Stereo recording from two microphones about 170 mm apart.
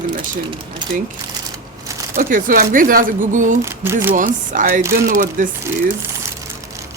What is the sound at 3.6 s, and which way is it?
Speech, 15° right (ahead or behind).